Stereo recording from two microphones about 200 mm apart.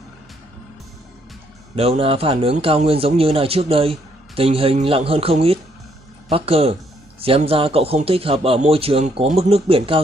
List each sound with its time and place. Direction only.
1.8 s a man's voice: 30° right (ahead or behind)